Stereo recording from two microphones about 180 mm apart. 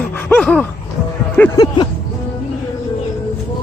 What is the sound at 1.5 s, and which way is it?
Speech, 25° left (ahead or behind).